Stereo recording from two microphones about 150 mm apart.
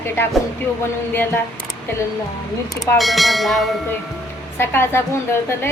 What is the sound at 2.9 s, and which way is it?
Speech, centre (ahead or behind).